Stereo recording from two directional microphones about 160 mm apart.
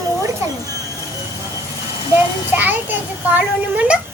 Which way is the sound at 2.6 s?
10° right (ahead or behind).